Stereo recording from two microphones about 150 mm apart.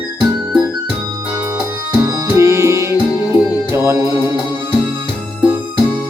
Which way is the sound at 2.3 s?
20° right (ahead or behind).